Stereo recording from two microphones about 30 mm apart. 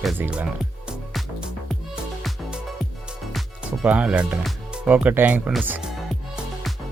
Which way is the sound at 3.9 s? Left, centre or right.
Right.